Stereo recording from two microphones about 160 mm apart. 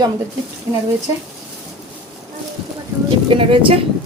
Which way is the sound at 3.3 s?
35° right (ahead or behind).